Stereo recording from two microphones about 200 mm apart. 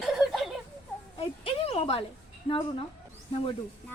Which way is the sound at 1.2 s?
30° left (ahead or behind).